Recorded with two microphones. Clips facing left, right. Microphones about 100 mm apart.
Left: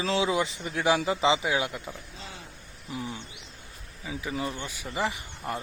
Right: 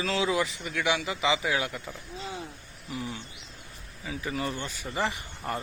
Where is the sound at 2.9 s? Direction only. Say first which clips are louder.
Even; 20° left (ahead or behind).